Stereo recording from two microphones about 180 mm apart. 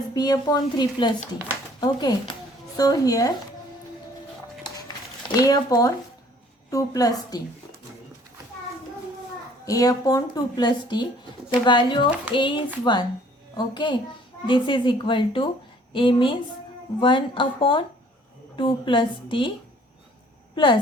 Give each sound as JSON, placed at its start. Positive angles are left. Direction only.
{"t": 0.1, "sound": "speech", "side_deg": 20}
{"t": 5.3, "sound": "speech", "side_deg": 20}
{"t": 9.6, "sound": "speech", "side_deg": 20}